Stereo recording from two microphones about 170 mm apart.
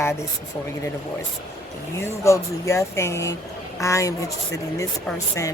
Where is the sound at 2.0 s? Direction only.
15° left (ahead or behind).